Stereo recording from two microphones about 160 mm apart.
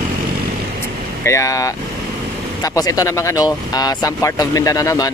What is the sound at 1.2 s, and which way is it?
Speech, 20° left (ahead or behind).